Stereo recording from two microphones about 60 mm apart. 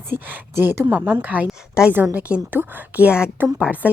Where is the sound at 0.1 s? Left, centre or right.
Right.